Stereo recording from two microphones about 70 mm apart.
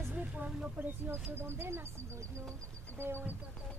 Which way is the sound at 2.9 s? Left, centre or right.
Right.